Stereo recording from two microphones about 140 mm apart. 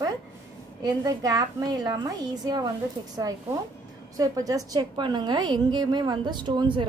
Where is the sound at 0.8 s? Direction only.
25° right (ahead or behind).